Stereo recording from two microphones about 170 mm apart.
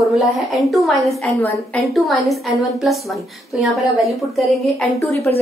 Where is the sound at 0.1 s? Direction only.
Centre (ahead or behind).